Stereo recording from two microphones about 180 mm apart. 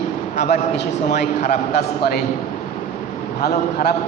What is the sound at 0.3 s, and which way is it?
A man's voice, 45° left (ahead or behind).